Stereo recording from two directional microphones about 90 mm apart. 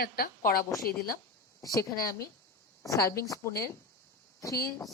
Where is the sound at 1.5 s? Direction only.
40° left (ahead or behind).